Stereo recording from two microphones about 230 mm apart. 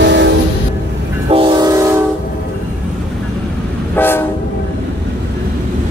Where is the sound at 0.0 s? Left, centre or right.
Right.